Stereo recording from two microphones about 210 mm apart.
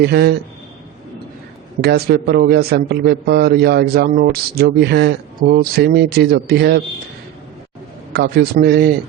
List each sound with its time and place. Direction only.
0.0 s a man's voice: 50° right (ahead or behind)
1.8 s a man's voice: 50° right (ahead or behind)
8.1 s a man's voice: 50° right (ahead or behind)